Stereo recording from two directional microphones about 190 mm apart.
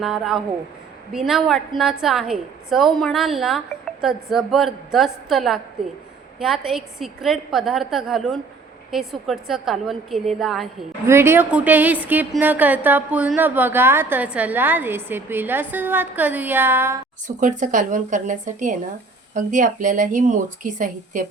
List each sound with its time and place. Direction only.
0.0 s a woman's voice: centre (ahead or behind)
11.0 s a woman's voice: 15° right (ahead or behind)
17.2 s a woman's voice: 40° right (ahead or behind)